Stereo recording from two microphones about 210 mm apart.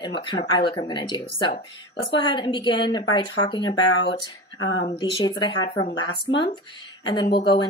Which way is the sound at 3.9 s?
65° left (ahead or behind).